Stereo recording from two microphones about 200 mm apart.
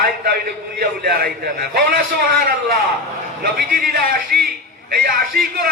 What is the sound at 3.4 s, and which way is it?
A man's voice, 45° right (ahead or behind).